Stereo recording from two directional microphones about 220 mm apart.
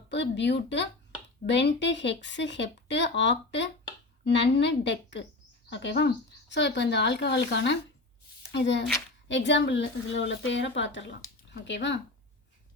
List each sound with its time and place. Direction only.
0.1 s a woman's voice: 55° left (ahead or behind)